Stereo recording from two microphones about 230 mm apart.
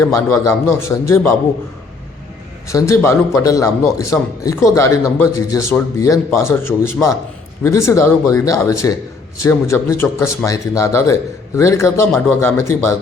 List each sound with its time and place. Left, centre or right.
0.0 s a man's voice: centre
2.6 s a man's voice: centre